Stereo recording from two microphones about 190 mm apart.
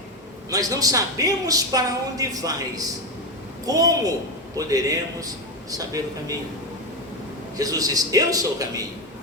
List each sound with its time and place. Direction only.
0.5 s a woman's voice: 20° right (ahead or behind)
7.5 s a woman's voice: 20° right (ahead or behind)